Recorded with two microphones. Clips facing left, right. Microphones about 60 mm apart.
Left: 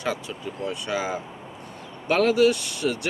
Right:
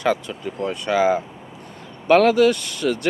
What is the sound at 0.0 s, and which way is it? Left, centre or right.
Speech, right.